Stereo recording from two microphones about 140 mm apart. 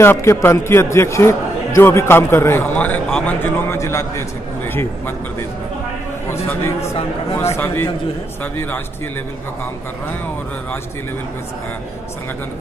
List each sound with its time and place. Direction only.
0.0 s a man's voice: 20° left (ahead or behind)
3.7 s a man's voice: 20° left (ahead or behind)
6.3 s a man's voice: 20° left (ahead or behind)